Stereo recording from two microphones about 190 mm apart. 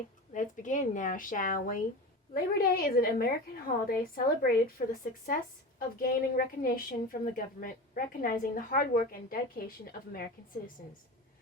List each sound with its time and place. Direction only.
0.3 s a woman's voice: 40° left (ahead or behind)
6.0 s a woman's voice: 50° left (ahead or behind)